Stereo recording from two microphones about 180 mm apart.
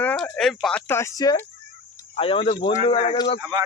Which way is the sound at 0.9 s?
15° left (ahead or behind).